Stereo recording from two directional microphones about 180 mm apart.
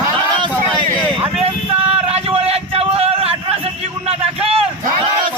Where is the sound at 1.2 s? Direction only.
30° right (ahead or behind).